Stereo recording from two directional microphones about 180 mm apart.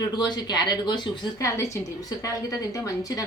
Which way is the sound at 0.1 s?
25° left (ahead or behind).